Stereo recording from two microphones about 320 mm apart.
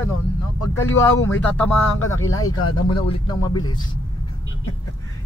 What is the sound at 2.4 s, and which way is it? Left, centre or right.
Speech, left.